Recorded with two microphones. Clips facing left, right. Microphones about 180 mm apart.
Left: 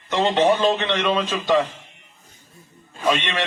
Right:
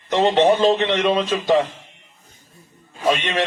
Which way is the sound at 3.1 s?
35° right (ahead or behind).